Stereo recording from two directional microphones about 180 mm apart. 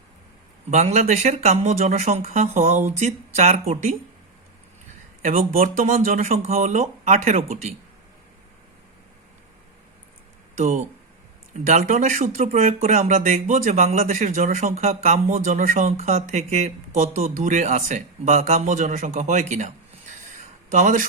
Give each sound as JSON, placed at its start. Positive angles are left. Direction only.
{"t": 0.7, "sound": "speech", "side_deg": -40}
{"t": 5.2, "sound": "speech", "side_deg": -45}
{"t": 10.6, "sound": "a man's voice", "side_deg": -40}